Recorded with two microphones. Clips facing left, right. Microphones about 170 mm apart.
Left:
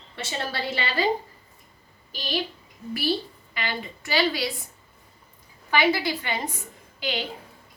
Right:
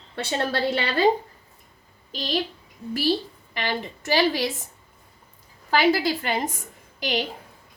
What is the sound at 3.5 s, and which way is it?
Speech, 45° right (ahead or behind).